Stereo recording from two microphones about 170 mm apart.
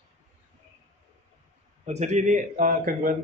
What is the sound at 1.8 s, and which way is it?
Speech, 40° right (ahead or behind).